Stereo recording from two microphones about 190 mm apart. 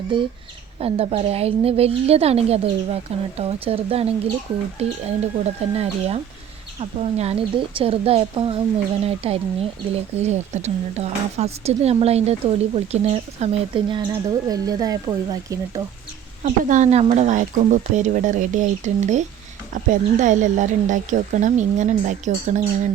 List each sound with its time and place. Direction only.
0.1 s a woman's voice: 25° right (ahead or behind)
7.2 s a woman's voice: 30° right (ahead or behind)
16.4 s a woman's voice: 40° right (ahead or behind)